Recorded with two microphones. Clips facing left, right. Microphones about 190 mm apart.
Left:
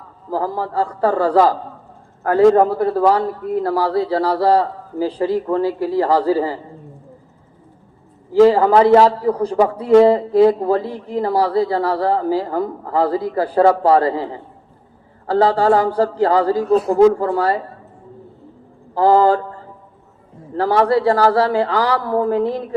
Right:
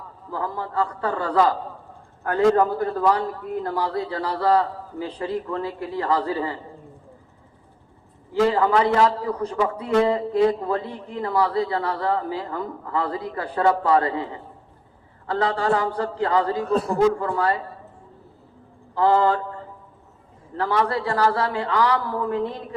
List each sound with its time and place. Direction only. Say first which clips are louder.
0.3 s a man's voice: left 7 dB; 35° left (ahead or behind)
3.7 s speech: left 6 dB; 90° left
3.9 s a man's voice: left 9 dB; 35° left (ahead or behind)
8.3 s a man's voice: left 8 dB; 35° left (ahead or behind)
15.3 s a man's voice: left 8 dB; 35° left (ahead or behind)
18.9 s a man's voice: left 6 dB; 35° left (ahead or behind)
20.6 s a man's voice: left 7 dB; 35° left (ahead or behind)